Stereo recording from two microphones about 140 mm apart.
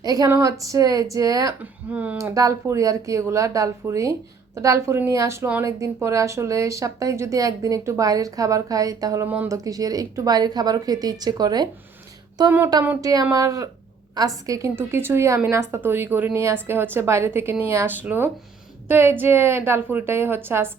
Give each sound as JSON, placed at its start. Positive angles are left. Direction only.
{"t": 0.0, "sound": "a woman's voice", "side_deg": -25}
{"t": 1.9, "sound": "a woman's voice", "side_deg": -10}
{"t": 2.1, "sound": "a woman's voice", "side_deg": -25}
{"t": 12.5, "sound": "a woman's voice", "side_deg": -15}
{"t": 13.0, "sound": "a woman's voice", "side_deg": -25}